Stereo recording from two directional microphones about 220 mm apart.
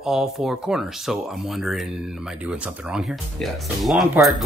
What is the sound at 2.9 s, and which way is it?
Speech, centre (ahead or behind).